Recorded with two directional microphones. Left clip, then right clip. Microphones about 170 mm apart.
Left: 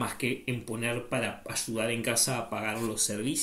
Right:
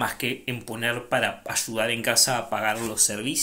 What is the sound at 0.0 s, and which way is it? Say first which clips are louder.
Speech: right 5 dB; 15° left (ahead or behind).